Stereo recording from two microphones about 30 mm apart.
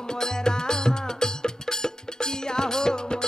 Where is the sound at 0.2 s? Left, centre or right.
Left.